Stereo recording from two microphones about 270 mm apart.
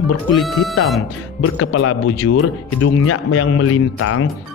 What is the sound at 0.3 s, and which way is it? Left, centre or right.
Speech, centre.